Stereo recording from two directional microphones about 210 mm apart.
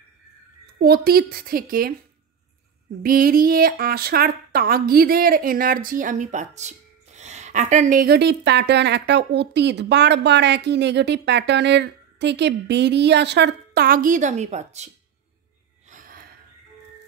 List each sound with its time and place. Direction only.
0.7 s speech: 45° right (ahead or behind)
3.0 s speech: 45° right (ahead or behind)
15.9 s gasp: 40° right (ahead or behind)